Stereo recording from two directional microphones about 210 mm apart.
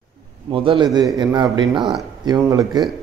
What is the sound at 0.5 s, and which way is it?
A man's voice, 25° right (ahead or behind).